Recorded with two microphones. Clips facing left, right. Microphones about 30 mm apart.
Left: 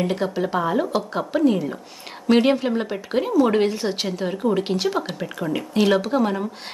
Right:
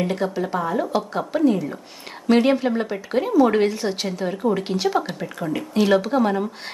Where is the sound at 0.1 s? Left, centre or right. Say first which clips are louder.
Left 1 dB; centre.